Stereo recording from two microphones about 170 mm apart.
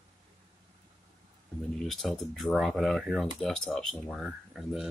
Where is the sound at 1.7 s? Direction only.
Centre (ahead or behind).